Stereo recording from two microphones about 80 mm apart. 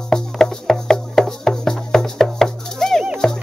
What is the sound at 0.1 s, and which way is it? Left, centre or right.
Music, centre.